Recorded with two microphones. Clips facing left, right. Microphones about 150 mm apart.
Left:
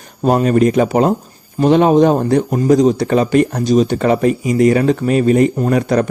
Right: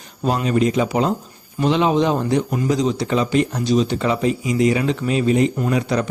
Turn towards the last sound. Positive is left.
turn(degrees=50)  # may be behind; listen again after turning